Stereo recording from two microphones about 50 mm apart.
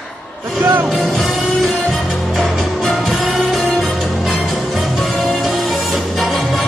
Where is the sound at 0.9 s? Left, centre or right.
Centre.